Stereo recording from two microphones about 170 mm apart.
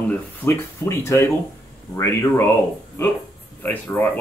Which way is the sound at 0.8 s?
15° left (ahead or behind).